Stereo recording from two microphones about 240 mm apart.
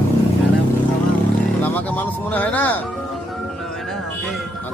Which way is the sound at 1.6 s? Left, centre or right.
Centre.